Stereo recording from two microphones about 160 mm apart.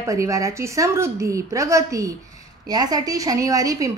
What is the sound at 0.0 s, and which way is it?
A woman's voice, 20° right (ahead or behind).